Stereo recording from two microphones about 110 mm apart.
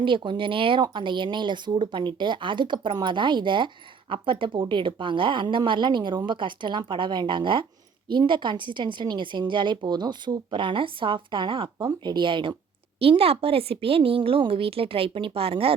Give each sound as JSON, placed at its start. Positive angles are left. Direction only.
{"t": 0.0, "sound": "a woman's voice", "side_deg": -45}
{"t": 13.0, "sound": "a woman's voice", "side_deg": -60}